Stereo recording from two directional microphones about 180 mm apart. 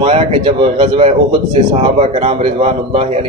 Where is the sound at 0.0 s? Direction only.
30° right (ahead or behind).